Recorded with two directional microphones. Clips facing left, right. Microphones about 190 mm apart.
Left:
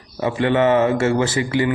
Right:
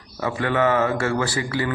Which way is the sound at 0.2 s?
25° left (ahead or behind).